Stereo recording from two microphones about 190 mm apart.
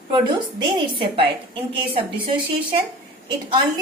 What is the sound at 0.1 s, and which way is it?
A woman's voice, 25° right (ahead or behind).